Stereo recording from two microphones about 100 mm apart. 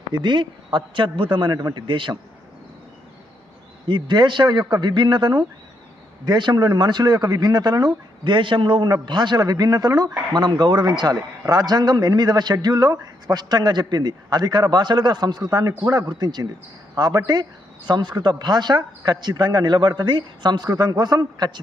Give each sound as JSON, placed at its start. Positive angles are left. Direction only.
{"t": 0.1, "sound": "a man's voice", "side_deg": -50}
{"t": 1.5, "sound": "speech", "side_deg": -40}
{"t": 1.9, "sound": "a man's voice", "side_deg": -55}
{"t": 3.8, "sound": "a man's voice", "side_deg": -50}